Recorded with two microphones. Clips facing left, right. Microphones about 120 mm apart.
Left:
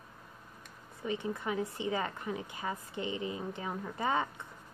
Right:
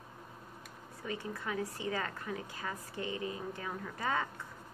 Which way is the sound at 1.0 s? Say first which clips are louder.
Left 4 dB; 20° left (ahead or behind).